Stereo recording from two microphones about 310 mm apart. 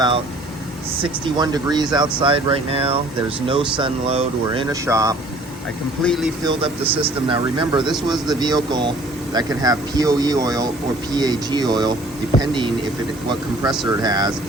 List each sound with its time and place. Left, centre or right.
1.2 s speech: centre
6.0 s speech: centre
6.4 s speech: centre